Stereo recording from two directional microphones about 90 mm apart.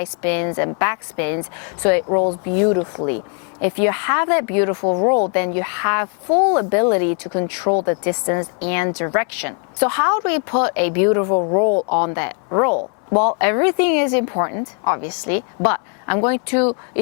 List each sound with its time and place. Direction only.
0.0 s a woman's voice: 15° left (ahead or behind)